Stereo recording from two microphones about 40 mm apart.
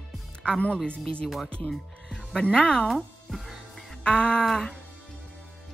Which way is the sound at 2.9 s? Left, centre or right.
Centre.